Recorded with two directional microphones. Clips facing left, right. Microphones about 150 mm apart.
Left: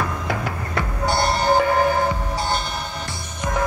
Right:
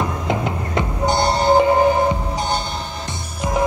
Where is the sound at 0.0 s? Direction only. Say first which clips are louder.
Right 3 dB; 20° right (ahead or behind).